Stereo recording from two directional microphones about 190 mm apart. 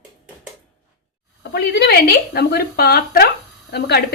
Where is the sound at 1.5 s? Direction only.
60° left (ahead or behind).